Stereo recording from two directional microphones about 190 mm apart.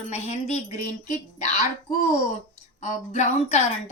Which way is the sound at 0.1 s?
35° left (ahead or behind).